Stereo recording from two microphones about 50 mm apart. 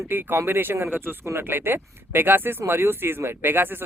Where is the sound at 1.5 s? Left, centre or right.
Right.